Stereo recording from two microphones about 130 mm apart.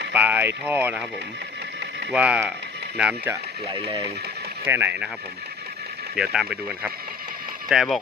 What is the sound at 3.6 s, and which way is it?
Speech, 45° right (ahead or behind).